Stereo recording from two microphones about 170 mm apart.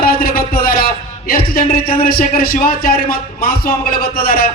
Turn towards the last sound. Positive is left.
turn(degrees=60)  # may be behind; listen again after turning